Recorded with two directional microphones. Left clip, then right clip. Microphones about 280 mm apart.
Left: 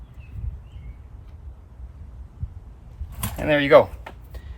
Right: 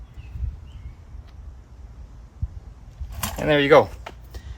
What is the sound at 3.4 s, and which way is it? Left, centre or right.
Speech, right.